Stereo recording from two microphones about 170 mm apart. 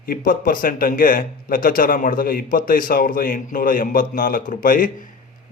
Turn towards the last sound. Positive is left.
turn(degrees=50)  # may be behind; listen again after turning